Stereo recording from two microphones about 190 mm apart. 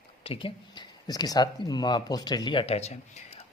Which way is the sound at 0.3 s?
25° left (ahead or behind).